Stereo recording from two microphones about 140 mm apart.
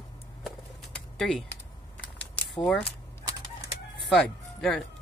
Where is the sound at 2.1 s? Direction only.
10° left (ahead or behind).